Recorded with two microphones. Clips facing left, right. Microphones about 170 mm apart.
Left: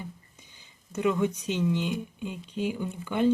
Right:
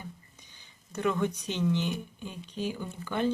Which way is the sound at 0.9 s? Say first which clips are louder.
Left 3 dB; 10° left (ahead or behind).